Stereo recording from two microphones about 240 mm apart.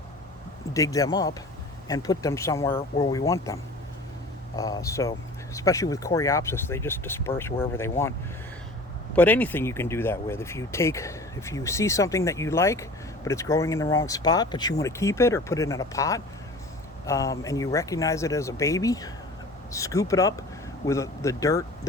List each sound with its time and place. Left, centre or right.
0.7 s speech: centre
9.1 s speech: centre